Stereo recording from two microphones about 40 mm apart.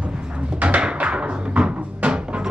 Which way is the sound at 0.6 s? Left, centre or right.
Right.